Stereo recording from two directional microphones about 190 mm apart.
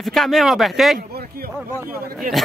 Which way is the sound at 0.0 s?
Centre (ahead or behind).